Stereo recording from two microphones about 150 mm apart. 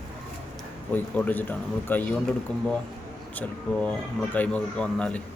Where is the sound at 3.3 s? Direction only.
10° left (ahead or behind).